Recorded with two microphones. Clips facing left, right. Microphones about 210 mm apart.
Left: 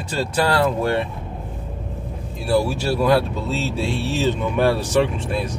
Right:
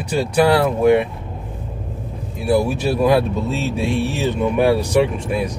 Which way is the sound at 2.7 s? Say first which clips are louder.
Right 2 dB; 20° right (ahead or behind).